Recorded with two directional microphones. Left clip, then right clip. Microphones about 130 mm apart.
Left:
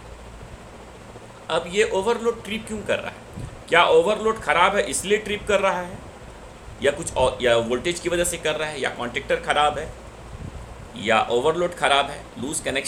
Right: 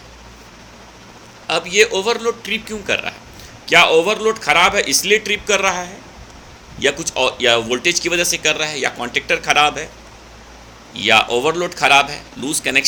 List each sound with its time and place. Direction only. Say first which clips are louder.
1.5 s a man's voice: right 7 dB; 35° right (ahead or behind)
10.9 s speech: right 7 dB; 40° right (ahead or behind)
11.3 s a man's voice: right 3 dB; 25° right (ahead or behind)